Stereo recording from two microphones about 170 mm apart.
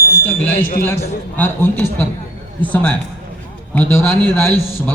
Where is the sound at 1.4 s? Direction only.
10° left (ahead or behind).